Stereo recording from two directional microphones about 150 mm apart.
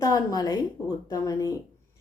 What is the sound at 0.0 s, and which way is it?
A woman's voice, 25° left (ahead or behind).